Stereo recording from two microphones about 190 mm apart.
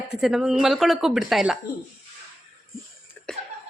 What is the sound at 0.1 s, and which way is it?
A woman's voice, 5° right (ahead or behind).